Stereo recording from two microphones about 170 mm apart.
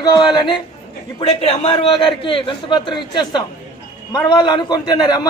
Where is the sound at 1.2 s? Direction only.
35° left (ahead or behind).